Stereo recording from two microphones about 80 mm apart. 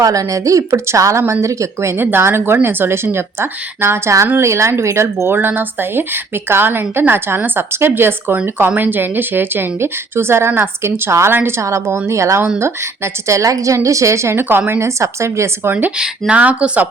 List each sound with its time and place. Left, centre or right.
0.0 s a woman's voice: right
16.0 s speech: centre